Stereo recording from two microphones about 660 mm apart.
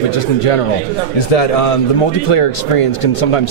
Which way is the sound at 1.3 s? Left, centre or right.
Left.